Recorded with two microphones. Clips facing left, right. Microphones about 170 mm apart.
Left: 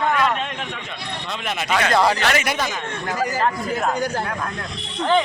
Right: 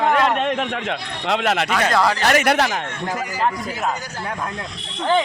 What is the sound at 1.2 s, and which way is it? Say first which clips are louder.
Speech: right 9 dB; 85° right.